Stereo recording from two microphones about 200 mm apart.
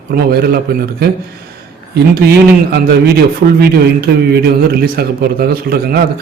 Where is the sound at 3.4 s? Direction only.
60° right (ahead or behind).